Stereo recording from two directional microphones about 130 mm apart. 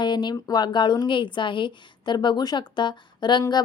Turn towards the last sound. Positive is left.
turn(degrees=30)  # may be behind; listen again after turning